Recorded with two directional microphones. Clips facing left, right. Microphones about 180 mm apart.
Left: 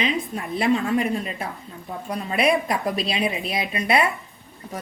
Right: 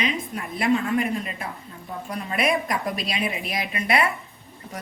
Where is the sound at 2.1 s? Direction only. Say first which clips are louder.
Left 3 dB; 35° left (ahead or behind).